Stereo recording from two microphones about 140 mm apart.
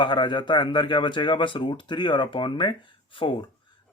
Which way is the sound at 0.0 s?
35° left (ahead or behind).